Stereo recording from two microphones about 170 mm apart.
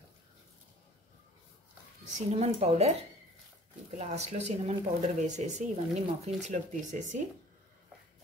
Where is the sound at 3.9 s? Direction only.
40° right (ahead or behind).